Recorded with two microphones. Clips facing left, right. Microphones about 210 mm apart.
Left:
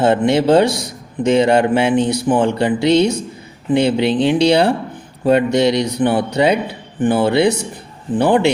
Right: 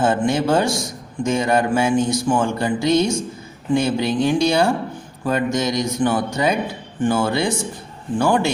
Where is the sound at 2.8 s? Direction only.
65° left (ahead or behind).